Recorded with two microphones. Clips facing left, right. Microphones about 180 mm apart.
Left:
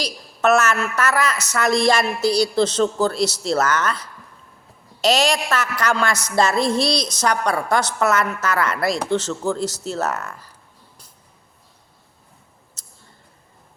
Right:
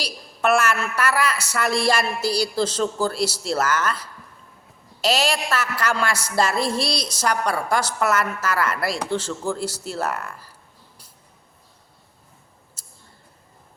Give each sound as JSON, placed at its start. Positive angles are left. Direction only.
{"t": 0.5, "sound": "a woman's voice", "side_deg": -10}
{"t": 5.0, "sound": "a woman's voice", "side_deg": -5}
{"t": 10.1, "sound": "speech", "side_deg": 45}